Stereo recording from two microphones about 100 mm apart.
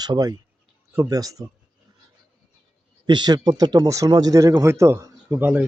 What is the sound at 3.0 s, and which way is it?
Speech, 45° right (ahead or behind).